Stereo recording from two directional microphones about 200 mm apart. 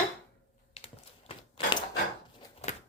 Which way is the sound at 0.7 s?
25° left (ahead or behind).